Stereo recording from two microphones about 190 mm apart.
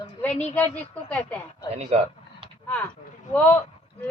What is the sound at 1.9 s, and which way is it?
Speech, 35° right (ahead or behind).